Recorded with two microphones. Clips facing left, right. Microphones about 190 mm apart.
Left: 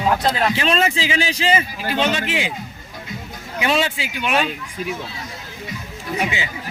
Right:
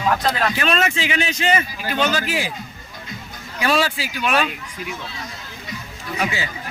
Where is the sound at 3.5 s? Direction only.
20° left (ahead or behind).